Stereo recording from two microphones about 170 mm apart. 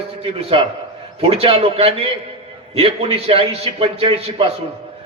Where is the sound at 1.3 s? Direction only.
35° right (ahead or behind).